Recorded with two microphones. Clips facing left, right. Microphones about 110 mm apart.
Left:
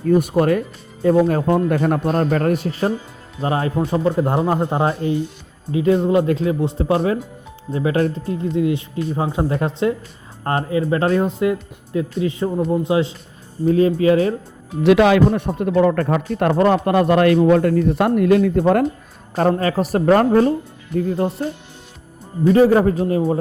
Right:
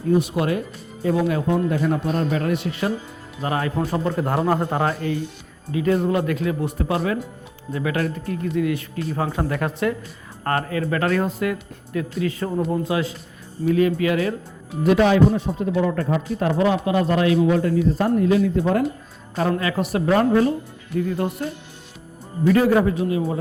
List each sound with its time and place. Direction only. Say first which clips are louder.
0.1 s a man's voice: left 5 dB; 50° left (ahead or behind); by 14.3 s 30° left (ahead or behind)
14.8 s speech: left 3 dB; 85° left; by 18.9 s 55° left (ahead or behind)
19.4 s speech: left 5 dB; 40° left (ahead or behind)
21.1 s speech: left 4 dB; 30° left (ahead or behind)
22.4 s speech: left 4 dB; 30° left (ahead or behind)